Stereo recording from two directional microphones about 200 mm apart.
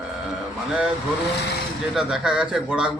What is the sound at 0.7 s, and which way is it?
Speech, 5° right (ahead or behind).